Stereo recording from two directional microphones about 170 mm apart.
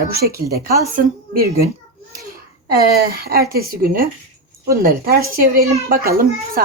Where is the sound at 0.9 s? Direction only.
60° right (ahead or behind).